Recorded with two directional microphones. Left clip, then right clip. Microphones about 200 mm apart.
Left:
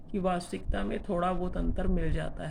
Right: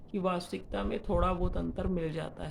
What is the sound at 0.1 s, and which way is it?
Speech, 15° right (ahead or behind).